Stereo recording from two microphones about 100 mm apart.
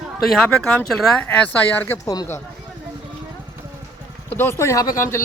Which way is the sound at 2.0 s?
40° left (ahead or behind).